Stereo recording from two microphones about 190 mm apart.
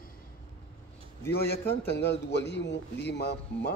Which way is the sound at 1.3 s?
55° left (ahead or behind).